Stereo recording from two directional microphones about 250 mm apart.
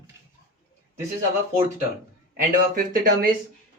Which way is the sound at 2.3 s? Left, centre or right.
Right.